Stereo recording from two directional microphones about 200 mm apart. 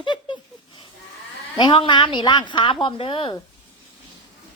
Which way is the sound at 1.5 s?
25° left (ahead or behind).